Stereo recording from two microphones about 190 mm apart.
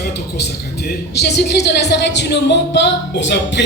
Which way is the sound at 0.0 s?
60° left (ahead or behind).